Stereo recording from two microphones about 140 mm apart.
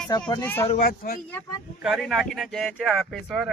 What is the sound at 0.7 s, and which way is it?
Speech, 65° left (ahead or behind).